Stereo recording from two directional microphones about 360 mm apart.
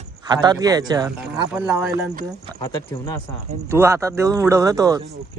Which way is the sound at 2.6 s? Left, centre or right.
Centre.